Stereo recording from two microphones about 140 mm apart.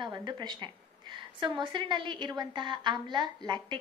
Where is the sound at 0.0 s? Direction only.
35° right (ahead or behind).